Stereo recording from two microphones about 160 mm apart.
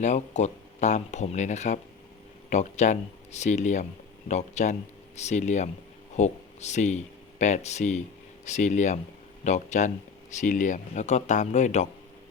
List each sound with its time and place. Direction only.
0.0 s speech: 45° left (ahead or behind)